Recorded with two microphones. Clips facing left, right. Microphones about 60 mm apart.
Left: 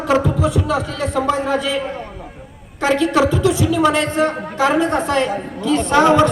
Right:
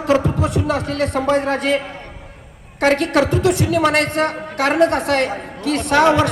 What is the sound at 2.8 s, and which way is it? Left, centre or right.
A man's voice, right.